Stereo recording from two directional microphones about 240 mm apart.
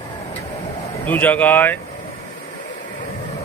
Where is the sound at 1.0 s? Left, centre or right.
Centre.